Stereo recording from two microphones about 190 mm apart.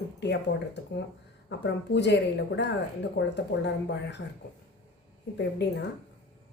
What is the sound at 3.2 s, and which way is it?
Speech, 65° left (ahead or behind).